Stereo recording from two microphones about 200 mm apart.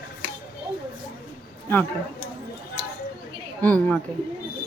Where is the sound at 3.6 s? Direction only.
5° left (ahead or behind).